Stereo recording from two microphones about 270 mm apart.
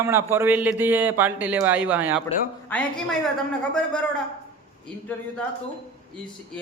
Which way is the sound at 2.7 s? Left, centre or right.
Centre.